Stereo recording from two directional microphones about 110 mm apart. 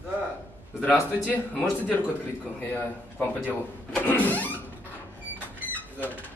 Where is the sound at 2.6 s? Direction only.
15° left (ahead or behind).